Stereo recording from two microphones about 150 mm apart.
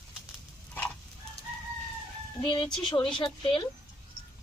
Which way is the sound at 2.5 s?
30° left (ahead or behind).